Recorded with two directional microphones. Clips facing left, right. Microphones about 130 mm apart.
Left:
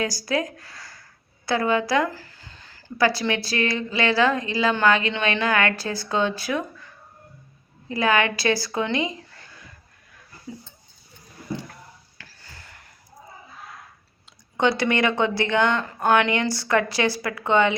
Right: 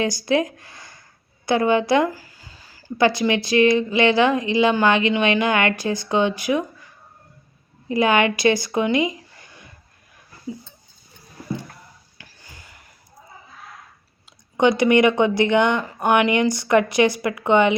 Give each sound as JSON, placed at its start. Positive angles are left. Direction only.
{"t": 0.0, "sound": "speech", "side_deg": -25}
{"t": 2.1, "sound": "a sound", "side_deg": -10}
{"t": 3.0, "sound": "speech", "side_deg": -20}
{"t": 7.9, "sound": "speech", "side_deg": -20}
{"t": 12.1, "sound": "a sound", "side_deg": -15}
{"t": 14.5, "sound": "speech", "side_deg": -15}